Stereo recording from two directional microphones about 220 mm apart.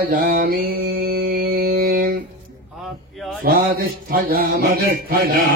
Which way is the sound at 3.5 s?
45° right (ahead or behind).